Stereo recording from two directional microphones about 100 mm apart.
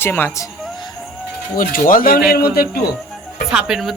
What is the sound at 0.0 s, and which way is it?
Speech, 20° left (ahead or behind).